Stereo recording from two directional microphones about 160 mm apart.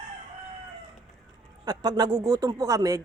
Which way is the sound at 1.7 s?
25° right (ahead or behind).